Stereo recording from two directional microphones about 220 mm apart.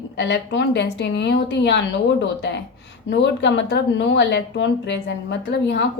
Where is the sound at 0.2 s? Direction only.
55° left (ahead or behind).